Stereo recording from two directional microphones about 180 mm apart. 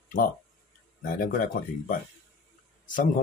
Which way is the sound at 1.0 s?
50° left (ahead or behind).